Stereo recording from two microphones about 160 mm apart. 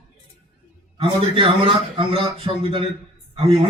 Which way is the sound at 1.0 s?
35° right (ahead or behind).